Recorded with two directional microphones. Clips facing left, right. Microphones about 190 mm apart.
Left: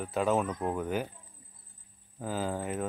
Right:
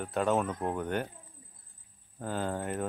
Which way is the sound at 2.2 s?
Centre (ahead or behind).